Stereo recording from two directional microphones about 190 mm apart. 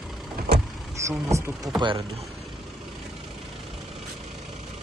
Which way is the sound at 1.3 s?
15° right (ahead or behind).